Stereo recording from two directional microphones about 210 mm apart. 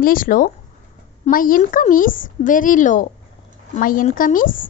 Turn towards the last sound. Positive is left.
turn(degrees=40)  # may be behind; listen again after turning